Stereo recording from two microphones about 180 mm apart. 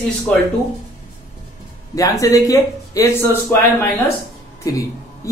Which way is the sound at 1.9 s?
20° left (ahead or behind).